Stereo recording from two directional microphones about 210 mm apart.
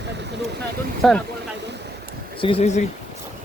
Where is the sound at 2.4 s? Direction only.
25° left (ahead or behind).